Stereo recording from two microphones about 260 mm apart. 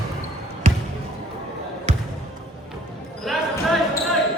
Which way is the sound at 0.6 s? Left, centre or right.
Right.